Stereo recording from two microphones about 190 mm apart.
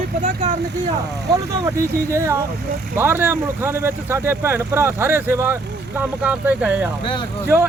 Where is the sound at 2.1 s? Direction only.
15° right (ahead or behind).